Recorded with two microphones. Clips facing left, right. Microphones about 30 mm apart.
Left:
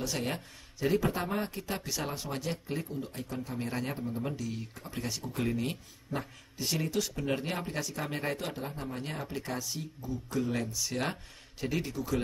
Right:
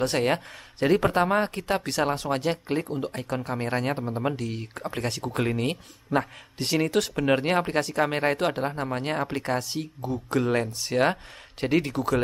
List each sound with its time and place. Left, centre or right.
0.0 s speech: right
11.6 s speech: right